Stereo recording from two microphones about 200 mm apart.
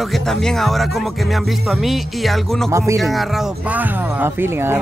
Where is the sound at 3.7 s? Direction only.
10° right (ahead or behind).